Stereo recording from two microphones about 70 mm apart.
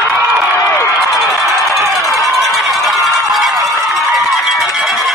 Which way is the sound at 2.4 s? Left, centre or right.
Centre.